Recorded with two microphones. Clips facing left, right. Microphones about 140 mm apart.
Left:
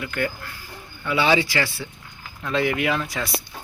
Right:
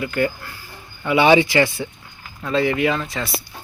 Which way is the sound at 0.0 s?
5° right (ahead or behind).